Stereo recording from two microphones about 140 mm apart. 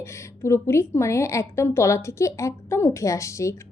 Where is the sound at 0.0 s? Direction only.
20° left (ahead or behind).